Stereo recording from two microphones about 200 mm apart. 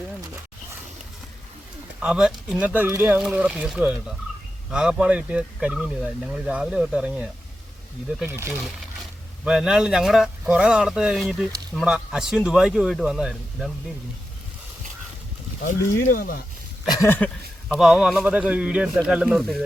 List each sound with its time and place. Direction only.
2.0 s speech: 5° right (ahead or behind)
16.0 s speech: 45° left (ahead or behind)
16.9 s speech: 10° left (ahead or behind)